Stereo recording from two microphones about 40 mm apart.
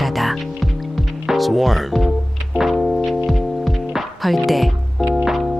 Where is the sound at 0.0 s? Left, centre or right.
Centre.